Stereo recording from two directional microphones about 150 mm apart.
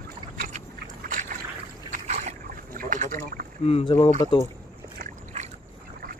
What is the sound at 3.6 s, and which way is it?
Speech, 40° left (ahead or behind).